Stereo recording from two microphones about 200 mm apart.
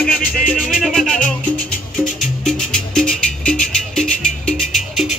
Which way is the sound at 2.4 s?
5° left (ahead or behind).